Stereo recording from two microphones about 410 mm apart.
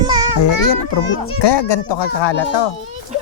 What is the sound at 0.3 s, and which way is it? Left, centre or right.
Speech, left.